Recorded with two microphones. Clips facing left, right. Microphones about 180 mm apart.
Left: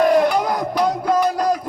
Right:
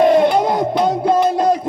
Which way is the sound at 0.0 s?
25° right (ahead or behind).